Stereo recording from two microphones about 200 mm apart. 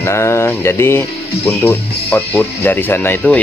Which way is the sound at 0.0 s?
15° left (ahead or behind).